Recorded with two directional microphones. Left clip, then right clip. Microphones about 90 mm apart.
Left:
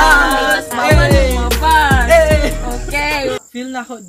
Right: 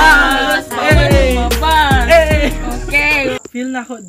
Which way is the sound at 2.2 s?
35° left (ahead or behind).